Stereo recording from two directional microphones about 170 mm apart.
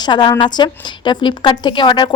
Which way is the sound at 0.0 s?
25° left (ahead or behind).